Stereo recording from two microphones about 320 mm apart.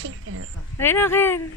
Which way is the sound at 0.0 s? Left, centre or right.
Right.